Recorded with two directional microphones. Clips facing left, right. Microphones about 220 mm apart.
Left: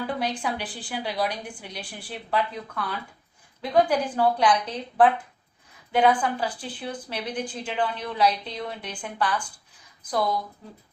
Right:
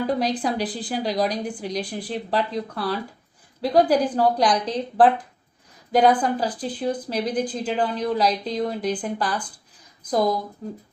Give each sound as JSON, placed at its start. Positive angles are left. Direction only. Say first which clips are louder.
{"t": 0.0, "sound": "a woman's voice", "louder": "right 5 dB", "side_deg": -35}